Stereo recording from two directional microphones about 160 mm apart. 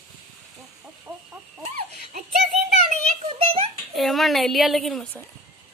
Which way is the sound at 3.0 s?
35° right (ahead or behind).